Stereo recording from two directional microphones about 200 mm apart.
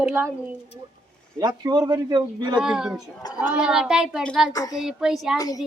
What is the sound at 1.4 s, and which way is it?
A man's voice, 20° right (ahead or behind).